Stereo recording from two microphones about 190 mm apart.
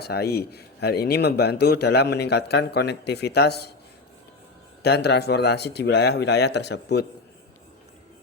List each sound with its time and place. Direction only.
0.0 s speech: 55° left (ahead or behind)
4.8 s speech: 60° left (ahead or behind)